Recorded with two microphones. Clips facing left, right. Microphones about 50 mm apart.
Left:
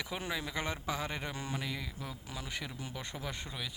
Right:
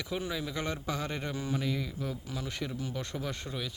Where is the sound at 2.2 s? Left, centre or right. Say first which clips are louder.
Right 4 dB; left.